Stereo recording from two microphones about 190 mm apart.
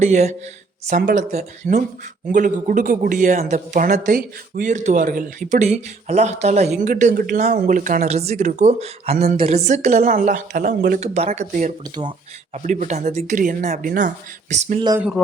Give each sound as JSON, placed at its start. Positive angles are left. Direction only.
{"t": 0.0, "sound": "speech", "side_deg": -35}